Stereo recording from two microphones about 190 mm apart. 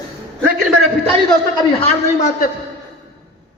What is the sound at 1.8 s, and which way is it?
Speech, 40° left (ahead or behind).